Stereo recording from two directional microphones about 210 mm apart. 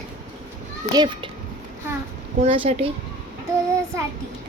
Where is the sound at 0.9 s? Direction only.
20° right (ahead or behind).